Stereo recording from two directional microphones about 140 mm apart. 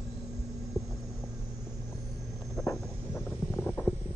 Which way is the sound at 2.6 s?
20° left (ahead or behind).